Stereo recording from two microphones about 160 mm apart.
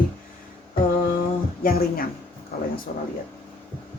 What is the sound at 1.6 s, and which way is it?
A woman's voice, 65° left (ahead or behind).